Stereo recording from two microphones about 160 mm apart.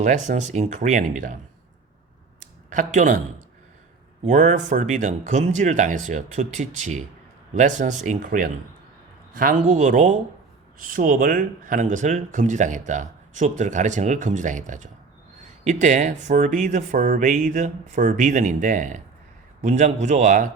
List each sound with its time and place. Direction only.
0.0 s speech: 50° right (ahead or behind)
2.4 s a sound: 50° right (ahead or behind)
4.3 s speech: 50° right (ahead or behind)